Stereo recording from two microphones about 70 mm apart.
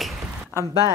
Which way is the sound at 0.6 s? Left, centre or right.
Left.